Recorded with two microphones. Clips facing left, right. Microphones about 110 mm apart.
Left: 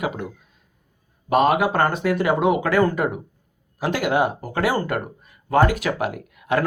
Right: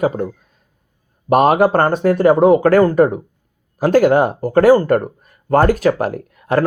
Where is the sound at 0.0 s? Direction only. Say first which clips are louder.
Right 9 dB; 40° right (ahead or behind).